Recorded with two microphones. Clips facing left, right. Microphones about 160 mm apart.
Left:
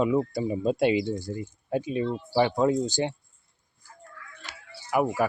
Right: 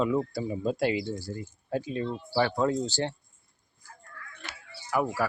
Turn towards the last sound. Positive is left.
turn(degrees=15)  # may be behind; listen again after turning